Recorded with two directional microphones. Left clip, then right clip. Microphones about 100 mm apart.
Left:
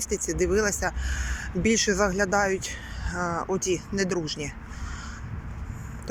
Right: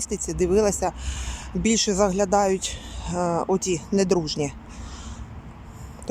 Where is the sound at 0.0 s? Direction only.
40° right (ahead or behind).